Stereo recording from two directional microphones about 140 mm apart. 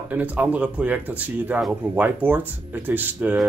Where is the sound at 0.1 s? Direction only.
10° right (ahead or behind).